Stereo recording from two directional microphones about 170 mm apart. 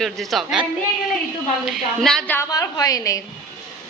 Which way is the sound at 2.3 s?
20° left (ahead or behind).